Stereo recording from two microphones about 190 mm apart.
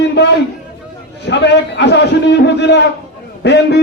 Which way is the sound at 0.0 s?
65° left (ahead or behind).